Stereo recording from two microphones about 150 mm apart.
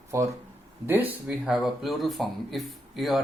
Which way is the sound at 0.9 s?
10° right (ahead or behind).